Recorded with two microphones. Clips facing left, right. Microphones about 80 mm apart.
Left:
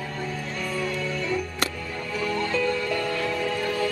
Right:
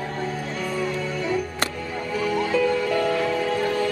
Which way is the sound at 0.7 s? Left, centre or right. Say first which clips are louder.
Right 1 dB; centre.